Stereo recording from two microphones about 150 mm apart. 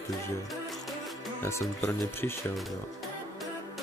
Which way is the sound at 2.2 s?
15° left (ahead or behind).